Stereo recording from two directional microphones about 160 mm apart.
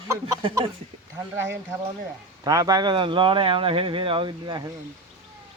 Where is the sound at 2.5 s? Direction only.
25° right (ahead or behind).